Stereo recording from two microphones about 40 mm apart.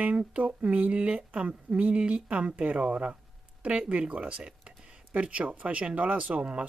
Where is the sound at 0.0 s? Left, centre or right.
Right.